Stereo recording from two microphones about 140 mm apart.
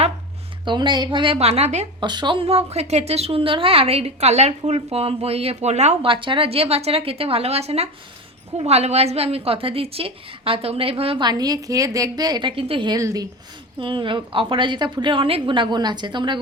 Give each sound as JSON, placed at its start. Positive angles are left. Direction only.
{"t": 0.6, "sound": "a woman's voice", "side_deg": -35}
{"t": 2.0, "sound": "a woman's voice", "side_deg": -35}
{"t": 6.1, "sound": "a woman's voice", "side_deg": -35}
{"t": 11.3, "sound": "a woman's voice", "side_deg": -30}
{"t": 13.7, "sound": "a woman's voice", "side_deg": -35}